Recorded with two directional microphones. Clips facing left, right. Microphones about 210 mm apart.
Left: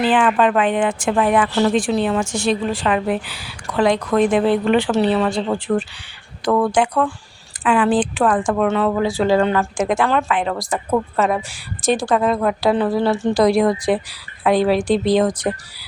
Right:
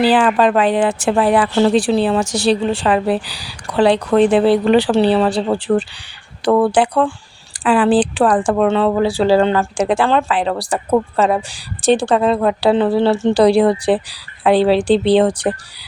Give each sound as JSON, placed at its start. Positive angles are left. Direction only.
{"t": 0.0, "sound": "speech", "side_deg": -35}